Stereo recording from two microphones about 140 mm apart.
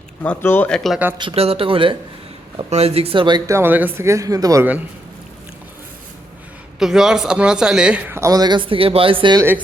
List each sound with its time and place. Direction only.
0.2 s speech: 15° left (ahead or behind)
1.2 s speech: 45° right (ahead or behind); by 4.6 s 25° right (ahead or behind)
6.7 s a man's voice: 5° right (ahead or behind); by 9.4 s 35° right (ahead or behind)
9.4 s a man's voice: 15° right (ahead or behind)